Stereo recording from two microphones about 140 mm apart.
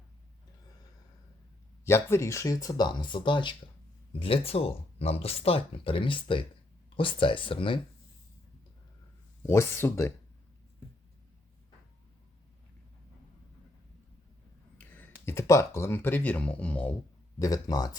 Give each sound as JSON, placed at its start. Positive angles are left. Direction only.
{"t": 1.8, "sound": "speech", "side_deg": 20}
{"t": 9.5, "sound": "speech", "side_deg": 20}
{"t": 14.8, "sound": "a sound", "side_deg": 15}
{"t": 15.3, "sound": "speech", "side_deg": 20}
{"t": 17.4, "sound": "speech", "side_deg": 25}